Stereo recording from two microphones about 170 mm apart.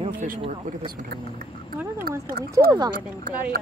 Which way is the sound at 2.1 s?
65° right (ahead or behind).